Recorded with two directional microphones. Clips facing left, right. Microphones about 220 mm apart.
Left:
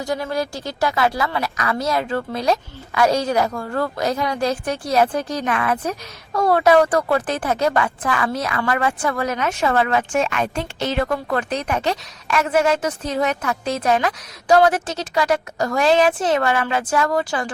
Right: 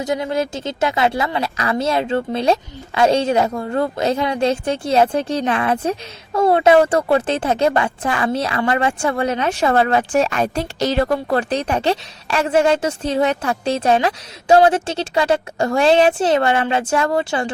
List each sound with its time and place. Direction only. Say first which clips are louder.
0.0 s a woman's voice: right 3 dB; 20° right (ahead or behind)